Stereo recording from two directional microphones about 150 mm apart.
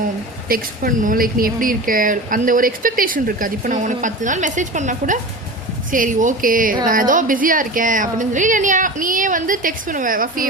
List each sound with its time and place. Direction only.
0.4 s speech: 70° right (ahead or behind)